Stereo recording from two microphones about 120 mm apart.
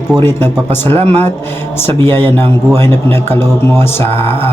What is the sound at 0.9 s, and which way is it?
Speech, 55° right (ahead or behind).